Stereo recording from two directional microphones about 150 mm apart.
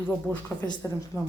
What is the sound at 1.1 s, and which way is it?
Speech, 15° left (ahead or behind).